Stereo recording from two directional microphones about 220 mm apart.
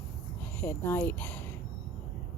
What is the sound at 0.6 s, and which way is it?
Speech, 10° left (ahead or behind).